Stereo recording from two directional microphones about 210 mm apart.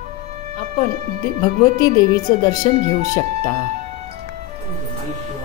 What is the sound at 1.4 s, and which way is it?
Speech, 20° left (ahead or behind).